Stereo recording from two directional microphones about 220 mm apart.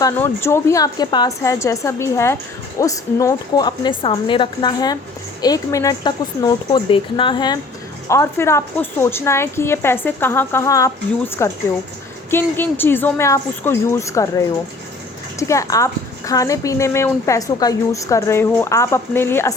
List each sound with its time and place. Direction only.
0.0 s a woman's voice: 10° left (ahead or behind)